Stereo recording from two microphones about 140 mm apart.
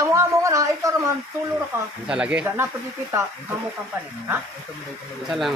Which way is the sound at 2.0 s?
5° right (ahead or behind).